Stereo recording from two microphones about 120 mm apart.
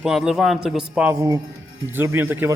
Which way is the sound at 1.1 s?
25° right (ahead or behind).